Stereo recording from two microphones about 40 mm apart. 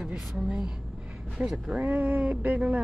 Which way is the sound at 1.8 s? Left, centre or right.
Right.